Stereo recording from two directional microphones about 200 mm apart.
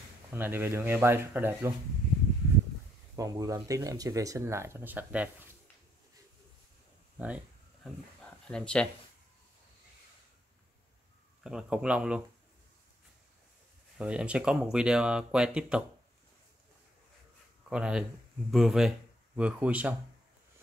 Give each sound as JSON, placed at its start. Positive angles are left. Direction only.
{"t": 0.3, "sound": "speech", "side_deg": -10}
{"t": 3.2, "sound": "speech", "side_deg": -15}
{"t": 7.2, "sound": "a sound", "side_deg": -5}
{"t": 8.2, "sound": "a sound", "side_deg": 5}
{"t": 11.4, "sound": "speech", "side_deg": -5}
{"t": 13.9, "sound": "speech", "side_deg": -5}
{"t": 17.6, "sound": "speech", "side_deg": -5}